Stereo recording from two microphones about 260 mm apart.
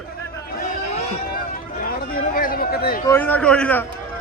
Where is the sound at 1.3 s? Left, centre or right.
Left.